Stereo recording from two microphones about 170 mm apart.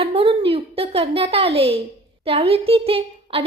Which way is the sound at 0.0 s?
35° right (ahead or behind).